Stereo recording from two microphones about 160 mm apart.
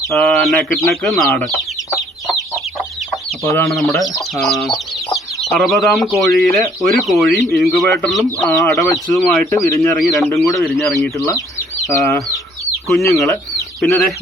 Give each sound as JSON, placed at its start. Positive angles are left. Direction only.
{"t": 0.1, "sound": "speech", "side_deg": 0}
{"t": 2.0, "sound": "chicken", "side_deg": 0}
{"t": 3.4, "sound": "speech", "side_deg": 15}
{"t": 3.7, "sound": "speech", "side_deg": 0}
{"t": 9.6, "sound": "speech", "side_deg": 20}
{"t": 10.0, "sound": "speech", "side_deg": 0}
{"t": 12.9, "sound": "speech", "side_deg": 0}